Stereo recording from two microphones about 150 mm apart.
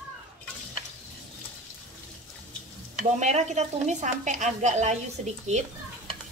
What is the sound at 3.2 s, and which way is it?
A woman's voice, 50° right (ahead or behind).